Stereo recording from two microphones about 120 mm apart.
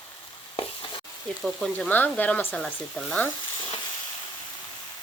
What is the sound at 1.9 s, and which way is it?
Speech, 15° left (ahead or behind).